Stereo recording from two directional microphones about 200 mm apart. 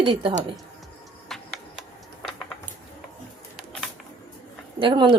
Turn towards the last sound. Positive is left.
turn(degrees=-25)  # may be behind; listen again after turning